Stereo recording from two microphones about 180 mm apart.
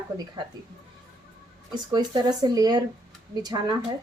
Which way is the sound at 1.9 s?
20° right (ahead or behind).